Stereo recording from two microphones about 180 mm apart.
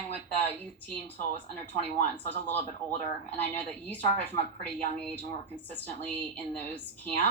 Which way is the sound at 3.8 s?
10° left (ahead or behind).